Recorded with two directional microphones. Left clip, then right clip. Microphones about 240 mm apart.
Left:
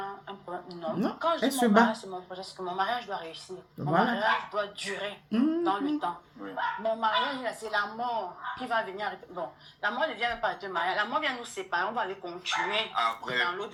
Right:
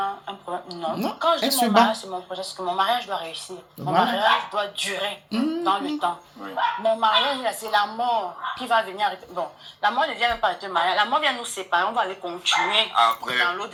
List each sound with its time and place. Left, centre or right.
0.0 s a sound: centre
1.5 s speech: right
1.9 s a woman's voice: centre